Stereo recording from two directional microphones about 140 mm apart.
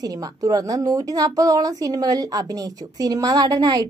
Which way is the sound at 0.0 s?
25° right (ahead or behind).